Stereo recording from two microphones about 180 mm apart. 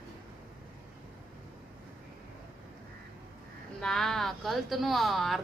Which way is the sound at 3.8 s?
5° left (ahead or behind).